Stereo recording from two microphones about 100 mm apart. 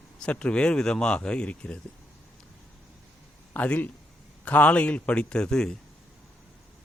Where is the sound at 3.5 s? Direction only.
15° left (ahead or behind).